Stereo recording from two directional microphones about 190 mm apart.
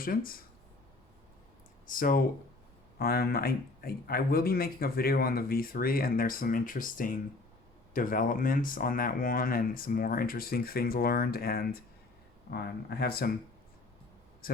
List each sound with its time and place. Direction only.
0.0 s speech: 50° left (ahead or behind)
1.9 s speech: 45° left (ahead or behind)
14.4 s speech: 50° left (ahead or behind)